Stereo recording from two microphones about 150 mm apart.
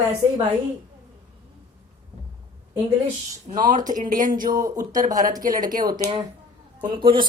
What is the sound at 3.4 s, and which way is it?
Speech, 65° right (ahead or behind).